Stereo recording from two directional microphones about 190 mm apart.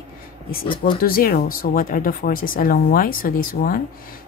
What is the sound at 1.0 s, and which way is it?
Speech, 50° left (ahead or behind).